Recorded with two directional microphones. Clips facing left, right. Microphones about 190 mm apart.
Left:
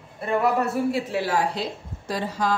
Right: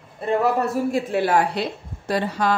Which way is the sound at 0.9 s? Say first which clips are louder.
Right 3 dB; 55° right (ahead or behind).